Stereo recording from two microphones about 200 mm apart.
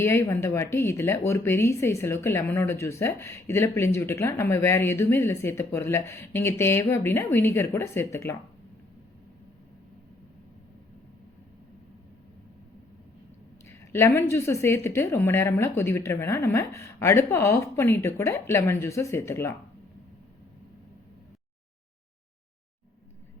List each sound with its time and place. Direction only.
0.0 s speech: 10° left (ahead or behind)
13.7 s speech: 10° left (ahead or behind)